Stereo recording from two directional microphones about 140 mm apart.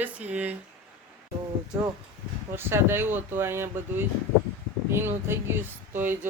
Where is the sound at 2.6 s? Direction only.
15° right (ahead or behind).